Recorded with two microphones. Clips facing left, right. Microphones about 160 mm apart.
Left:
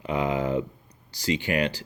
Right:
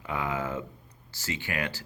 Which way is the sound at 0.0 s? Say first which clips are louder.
Left 6 dB; 20° left (ahead or behind).